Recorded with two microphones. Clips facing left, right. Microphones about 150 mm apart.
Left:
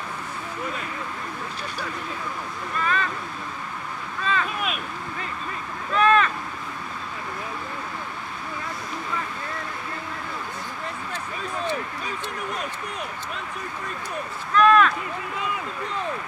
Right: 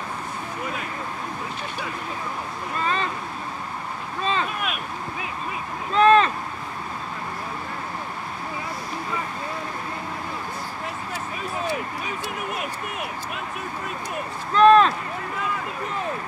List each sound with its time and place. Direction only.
2.8 s speech: 30° right (ahead or behind)
4.2 s boat: 30° right (ahead or behind)
5.9 s speech: 30° right (ahead or behind)
14.5 s speech: 30° right (ahead or behind)